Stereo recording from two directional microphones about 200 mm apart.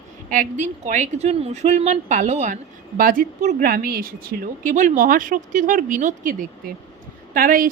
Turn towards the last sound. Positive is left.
turn(degrees=-45)  # may be behind; listen again after turning